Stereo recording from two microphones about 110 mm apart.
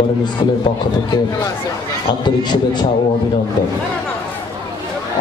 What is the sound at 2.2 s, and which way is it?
Speech, 40° left (ahead or behind).